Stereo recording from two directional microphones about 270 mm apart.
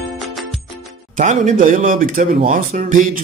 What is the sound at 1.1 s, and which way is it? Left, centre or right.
Speech, right.